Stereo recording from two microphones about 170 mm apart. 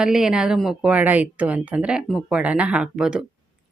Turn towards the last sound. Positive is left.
turn(degrees=-5)  # may be behind; listen again after turning